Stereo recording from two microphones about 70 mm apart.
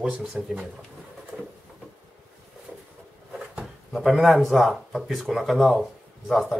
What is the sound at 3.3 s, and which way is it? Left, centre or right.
Speech, centre.